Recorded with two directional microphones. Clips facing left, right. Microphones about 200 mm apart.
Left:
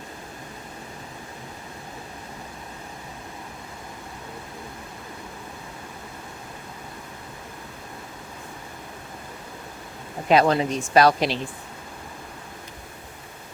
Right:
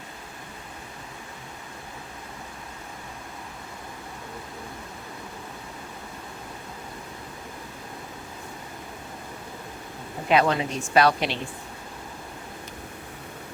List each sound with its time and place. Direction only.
10.2 s a woman's voice: 35° left (ahead or behind)